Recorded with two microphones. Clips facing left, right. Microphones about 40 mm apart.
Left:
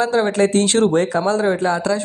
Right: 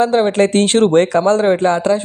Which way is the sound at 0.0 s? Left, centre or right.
Right.